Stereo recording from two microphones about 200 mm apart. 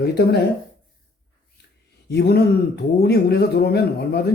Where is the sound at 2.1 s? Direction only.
55° left (ahead or behind).